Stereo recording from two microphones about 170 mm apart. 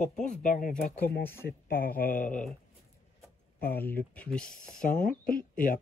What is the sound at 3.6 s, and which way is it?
Speech, 10° left (ahead or behind).